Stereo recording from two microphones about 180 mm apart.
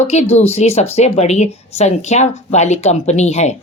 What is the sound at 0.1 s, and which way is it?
Speech, 35° left (ahead or behind).